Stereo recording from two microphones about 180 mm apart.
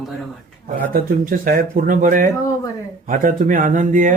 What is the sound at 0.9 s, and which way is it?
Speech, 50° right (ahead or behind).